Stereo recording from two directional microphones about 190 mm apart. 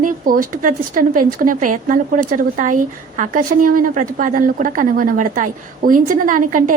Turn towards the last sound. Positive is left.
turn(degrees=-45)  # may be behind; listen again after turning